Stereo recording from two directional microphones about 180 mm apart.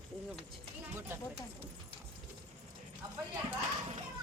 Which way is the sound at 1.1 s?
10° right (ahead or behind).